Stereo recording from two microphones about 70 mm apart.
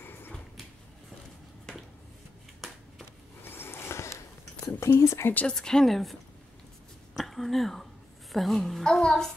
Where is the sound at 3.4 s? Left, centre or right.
Left.